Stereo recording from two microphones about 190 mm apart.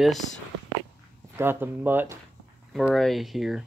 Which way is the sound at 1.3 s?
10° right (ahead or behind).